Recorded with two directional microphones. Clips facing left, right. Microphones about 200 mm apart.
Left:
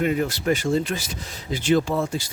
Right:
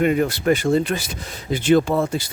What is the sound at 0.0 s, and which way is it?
Speech, 60° right (ahead or behind).